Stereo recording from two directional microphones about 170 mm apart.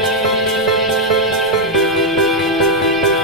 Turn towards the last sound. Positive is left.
turn(degrees=0)  # may be behind; listen again after turning